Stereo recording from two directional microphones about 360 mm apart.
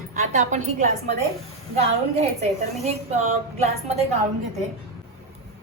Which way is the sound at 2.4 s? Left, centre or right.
Centre.